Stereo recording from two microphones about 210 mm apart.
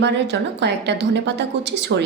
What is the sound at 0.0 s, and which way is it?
A woman's voice, 55° right (ahead or behind).